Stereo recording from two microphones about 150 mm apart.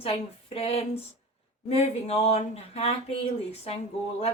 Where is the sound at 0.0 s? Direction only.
40° left (ahead or behind).